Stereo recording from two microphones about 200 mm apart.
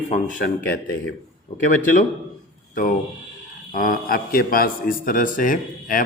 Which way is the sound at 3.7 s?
45° left (ahead or behind).